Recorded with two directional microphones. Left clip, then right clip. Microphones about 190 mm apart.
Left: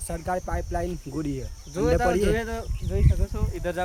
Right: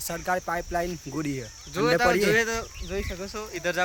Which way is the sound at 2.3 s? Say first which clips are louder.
Right 5 dB; 20° left (ahead or behind).